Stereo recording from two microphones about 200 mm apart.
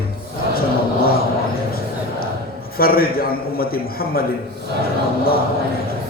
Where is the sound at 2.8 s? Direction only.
50° left (ahead or behind).